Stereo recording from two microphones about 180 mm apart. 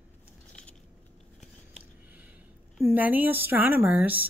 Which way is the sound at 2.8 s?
10° right (ahead or behind).